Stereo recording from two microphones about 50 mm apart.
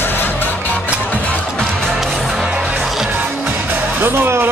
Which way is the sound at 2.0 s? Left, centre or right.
Centre.